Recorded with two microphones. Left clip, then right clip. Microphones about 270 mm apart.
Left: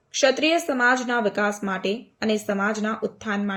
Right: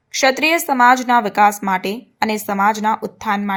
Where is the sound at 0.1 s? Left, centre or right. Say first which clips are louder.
Right 5 dB; right.